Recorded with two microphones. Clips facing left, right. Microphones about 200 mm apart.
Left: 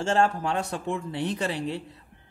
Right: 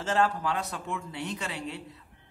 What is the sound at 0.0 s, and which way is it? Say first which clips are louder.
Speech: left 3 dB; 25° left (ahead or behind).